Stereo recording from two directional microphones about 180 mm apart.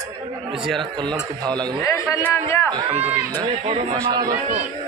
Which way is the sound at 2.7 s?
25° right (ahead or behind).